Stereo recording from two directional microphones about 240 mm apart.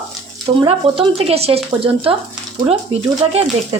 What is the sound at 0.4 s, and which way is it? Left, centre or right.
Speech, right.